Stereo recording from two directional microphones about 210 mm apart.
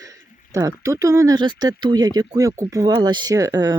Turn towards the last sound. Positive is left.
turn(degrees=-15)  # may be behind; listen again after turning